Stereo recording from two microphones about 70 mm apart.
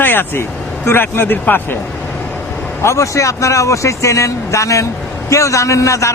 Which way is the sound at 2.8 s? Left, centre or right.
Left.